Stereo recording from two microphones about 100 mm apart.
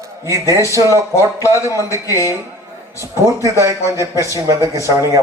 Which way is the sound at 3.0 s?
30° right (ahead or behind).